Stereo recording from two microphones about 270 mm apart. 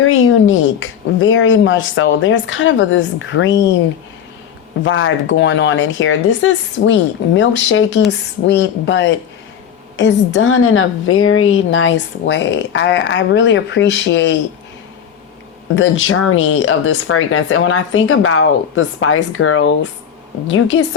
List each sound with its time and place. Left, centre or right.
0.0 s a woman's voice: left
4.9 s a woman's voice: left
15.7 s a woman's voice: left